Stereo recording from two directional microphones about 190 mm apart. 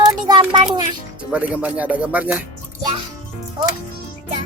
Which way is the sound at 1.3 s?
10° right (ahead or behind).